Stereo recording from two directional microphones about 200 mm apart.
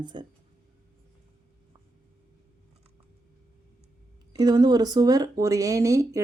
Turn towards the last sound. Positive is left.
turn(degrees=-15)  # may be behind; listen again after turning